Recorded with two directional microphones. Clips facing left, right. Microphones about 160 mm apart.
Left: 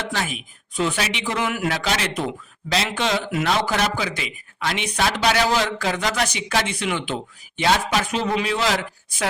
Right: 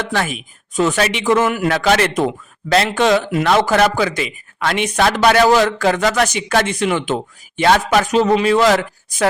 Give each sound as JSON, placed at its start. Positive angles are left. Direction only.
{"t": 0.1, "sound": "a man's voice", "side_deg": -55}
{"t": 1.6, "sound": "a woman's voice", "side_deg": -60}
{"t": 6.2, "sound": "a man's voice", "side_deg": -50}
{"t": 7.6, "sound": "a woman's voice", "side_deg": -55}
{"t": 8.0, "sound": "a man's voice", "side_deg": -40}